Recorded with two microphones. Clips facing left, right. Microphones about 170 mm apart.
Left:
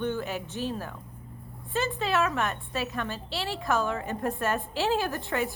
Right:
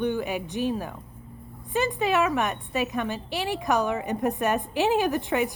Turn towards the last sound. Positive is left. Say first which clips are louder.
# right 5 dB
turn(degrees=-15)  # may be behind; listen again after turning